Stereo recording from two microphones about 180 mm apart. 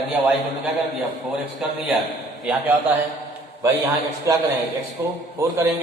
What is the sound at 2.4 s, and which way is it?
Speech, 5° right (ahead or behind).